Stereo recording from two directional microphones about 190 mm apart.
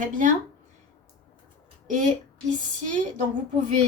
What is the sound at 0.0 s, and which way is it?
Speech, 45° right (ahead or behind).